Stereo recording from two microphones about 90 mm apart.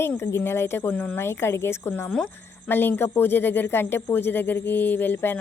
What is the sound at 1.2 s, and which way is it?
Speech, 25° left (ahead or behind).